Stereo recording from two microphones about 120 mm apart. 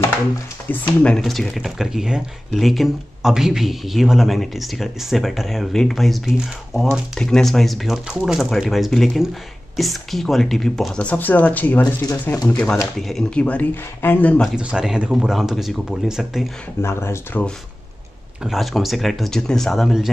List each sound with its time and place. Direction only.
0.7 s speech: 5° left (ahead or behind)
13.0 s speech: 5° left (ahead or behind)
14.4 s speech: 5° right (ahead or behind)
16.8 s speech: 20° left (ahead or behind)
18.4 s speech: centre (ahead or behind)